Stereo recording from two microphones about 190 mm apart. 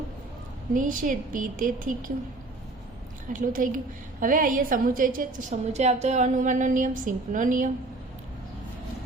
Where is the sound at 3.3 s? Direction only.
45° right (ahead or behind).